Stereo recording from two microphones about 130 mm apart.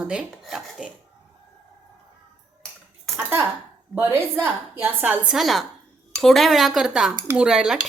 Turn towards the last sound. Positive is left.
turn(degrees=-5)  # may be behind; listen again after turning